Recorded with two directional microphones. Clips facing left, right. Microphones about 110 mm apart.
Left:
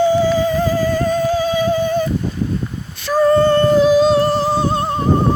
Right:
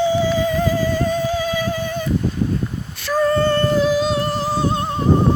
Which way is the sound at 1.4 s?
25° left (ahead or behind).